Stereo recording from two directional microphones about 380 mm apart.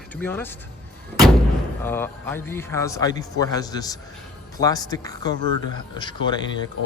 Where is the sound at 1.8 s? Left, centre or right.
Centre.